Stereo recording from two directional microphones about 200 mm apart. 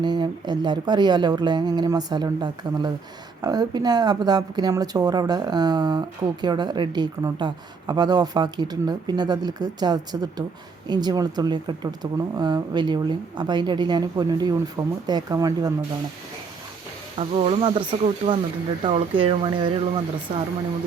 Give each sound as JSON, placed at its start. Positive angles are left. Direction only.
{"t": 0.0, "sound": "speech", "side_deg": -20}
{"t": 17.2, "sound": "speech", "side_deg": -30}